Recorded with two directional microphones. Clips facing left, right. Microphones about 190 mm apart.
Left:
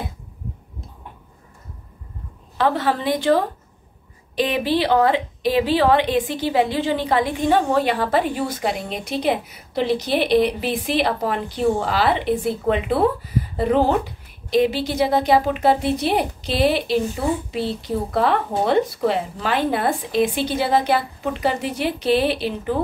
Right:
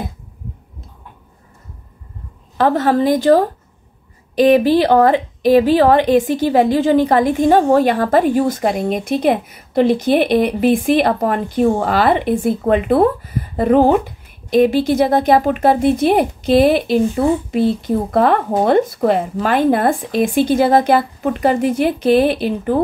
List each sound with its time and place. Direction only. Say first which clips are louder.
2.5 s a woman's voice: right 6 dB; 45° right (ahead or behind)